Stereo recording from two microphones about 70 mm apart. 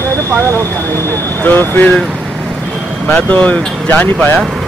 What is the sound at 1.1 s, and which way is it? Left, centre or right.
Speech, left.